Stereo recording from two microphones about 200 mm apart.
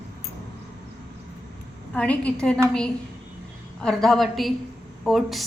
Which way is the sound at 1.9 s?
5° left (ahead or behind).